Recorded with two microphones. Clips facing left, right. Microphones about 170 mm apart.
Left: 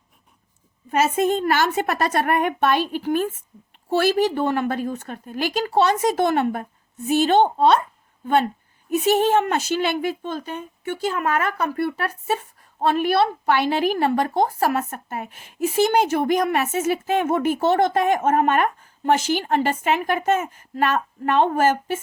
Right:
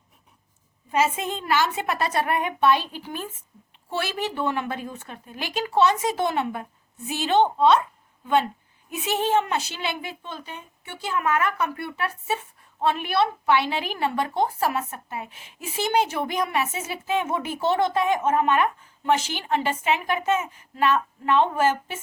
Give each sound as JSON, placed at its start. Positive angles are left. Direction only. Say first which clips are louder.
{"t": 0.9, "sound": "a woman's voice", "louder": "left 5 dB", "side_deg": 45}
{"t": 3.8, "sound": "a woman's voice", "louder": "left 10 dB", "side_deg": 40}
{"t": 8.9, "sound": "a woman's voice", "louder": "left 10 dB", "side_deg": 40}
{"t": 9.1, "sound": "a woman's voice", "louder": "even", "side_deg": 55}